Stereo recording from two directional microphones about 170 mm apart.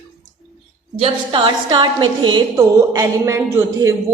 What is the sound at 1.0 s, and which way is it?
A woman's voice, 30° right (ahead or behind).